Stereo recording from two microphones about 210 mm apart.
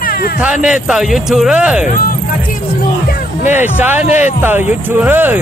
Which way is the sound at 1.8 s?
40° left (ahead or behind).